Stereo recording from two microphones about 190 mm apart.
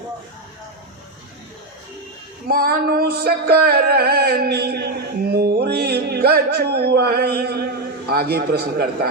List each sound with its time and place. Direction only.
2.5 s music: 55° right (ahead or behind)